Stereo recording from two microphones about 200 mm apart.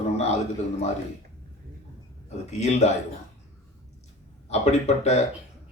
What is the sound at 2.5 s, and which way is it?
Speech, 35° left (ahead or behind).